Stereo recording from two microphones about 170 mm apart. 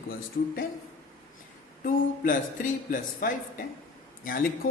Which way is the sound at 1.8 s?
55° left (ahead or behind).